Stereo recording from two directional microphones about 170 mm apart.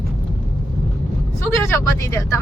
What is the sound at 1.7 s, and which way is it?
Speech, 15° left (ahead or behind).